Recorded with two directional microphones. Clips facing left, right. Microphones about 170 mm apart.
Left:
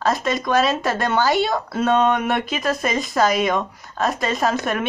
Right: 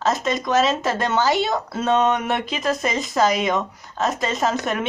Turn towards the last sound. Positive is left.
turn(degrees=-20)  # may be behind; listen again after turning